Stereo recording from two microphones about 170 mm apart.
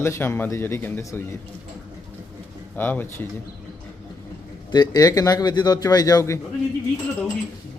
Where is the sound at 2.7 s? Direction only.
10° left (ahead or behind).